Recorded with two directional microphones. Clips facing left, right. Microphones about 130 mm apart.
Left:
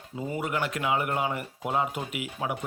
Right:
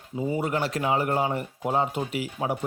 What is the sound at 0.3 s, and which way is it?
Speech, 30° right (ahead or behind).